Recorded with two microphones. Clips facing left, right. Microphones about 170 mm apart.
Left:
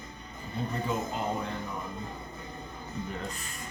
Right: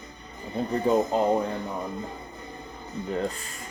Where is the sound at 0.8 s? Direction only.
35° right (ahead or behind).